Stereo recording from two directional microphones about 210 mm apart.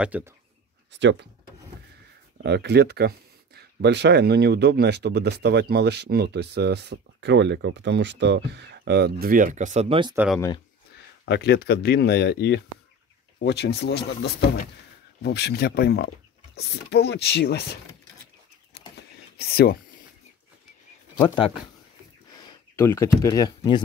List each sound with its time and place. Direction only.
0.0 s speech: 5° right (ahead or behind)
0.9 s speech: 60° right (ahead or behind)
2.4 s speech: 55° right (ahead or behind); by 10.1 s 25° right (ahead or behind)
10.1 s speech: 5° right (ahead or behind)
11.2 s speech: 50° left (ahead or behind)
18.9 s a sound: 50° left (ahead or behind)
22.8 s speech: 10° left (ahead or behind)